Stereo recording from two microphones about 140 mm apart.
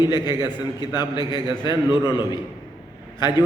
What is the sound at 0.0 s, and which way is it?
A man's voice, 30° left (ahead or behind).